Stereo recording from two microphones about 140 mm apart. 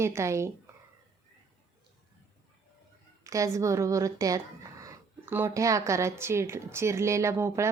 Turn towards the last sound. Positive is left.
turn(degrees=-20)  # may be behind; listen again after turning